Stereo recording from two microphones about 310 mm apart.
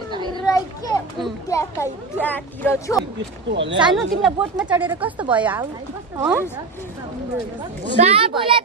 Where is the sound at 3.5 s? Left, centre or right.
Right.